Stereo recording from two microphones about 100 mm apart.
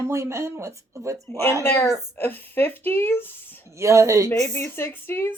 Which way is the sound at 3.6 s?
30° right (ahead or behind).